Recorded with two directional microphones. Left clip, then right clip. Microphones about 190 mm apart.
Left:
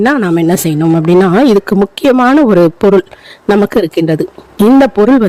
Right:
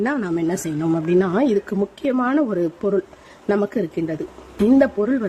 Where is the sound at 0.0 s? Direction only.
45° left (ahead or behind).